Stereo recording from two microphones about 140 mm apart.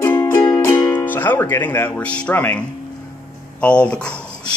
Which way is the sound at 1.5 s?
15° left (ahead or behind).